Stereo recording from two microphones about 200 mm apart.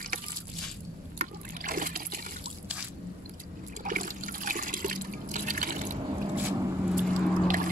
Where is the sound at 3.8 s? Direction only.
45° right (ahead or behind).